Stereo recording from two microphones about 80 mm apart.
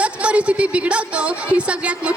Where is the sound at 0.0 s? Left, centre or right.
Centre.